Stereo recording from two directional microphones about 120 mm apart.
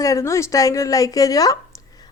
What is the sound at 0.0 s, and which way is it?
A woman's voice, 25° left (ahead or behind).